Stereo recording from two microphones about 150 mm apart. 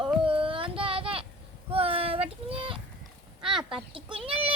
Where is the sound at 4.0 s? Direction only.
35° right (ahead or behind).